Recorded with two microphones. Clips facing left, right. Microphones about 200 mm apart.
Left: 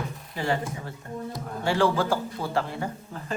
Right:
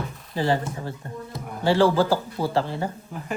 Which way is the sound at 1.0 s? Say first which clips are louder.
Left 1 dB; 35° right (ahead or behind).